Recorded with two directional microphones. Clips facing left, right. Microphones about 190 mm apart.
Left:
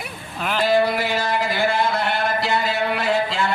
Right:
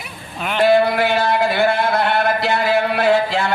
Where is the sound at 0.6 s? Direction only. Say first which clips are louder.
Right 5 dB; 60° right (ahead or behind).